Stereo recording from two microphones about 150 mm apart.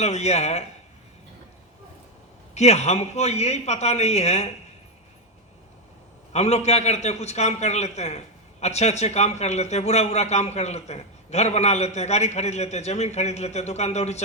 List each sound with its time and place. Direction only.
0.0 s a man's voice: 45° left (ahead or behind)
2.6 s a man's voice: 45° left (ahead or behind)
6.3 s a man's voice: 45° left (ahead or behind)